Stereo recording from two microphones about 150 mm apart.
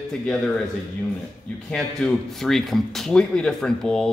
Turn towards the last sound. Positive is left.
turn(degrees=5)  # may be behind; listen again after turning